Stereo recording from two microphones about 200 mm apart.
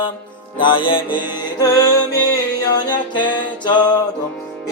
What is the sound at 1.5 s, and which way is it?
A capella, 15° left (ahead or behind).